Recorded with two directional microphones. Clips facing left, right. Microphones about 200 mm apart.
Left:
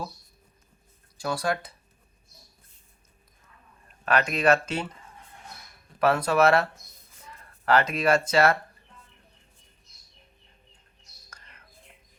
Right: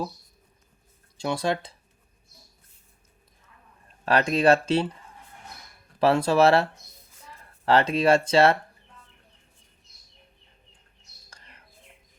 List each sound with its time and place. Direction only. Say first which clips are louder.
1.2 s speech: right 2 dB; 25° right (ahead or behind)
4.0 s speech: right 3 dB; 30° right (ahead or behind)
6.0 s speech: right 2 dB; 30° right (ahead or behind)
11.3 s bird: right 1 dB; 30° right (ahead or behind)